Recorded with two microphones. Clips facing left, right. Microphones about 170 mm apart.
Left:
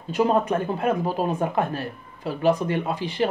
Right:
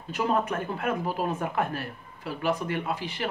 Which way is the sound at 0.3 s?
30° left (ahead or behind).